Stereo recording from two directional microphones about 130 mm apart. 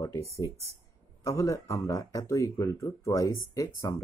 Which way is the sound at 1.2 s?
25° left (ahead or behind).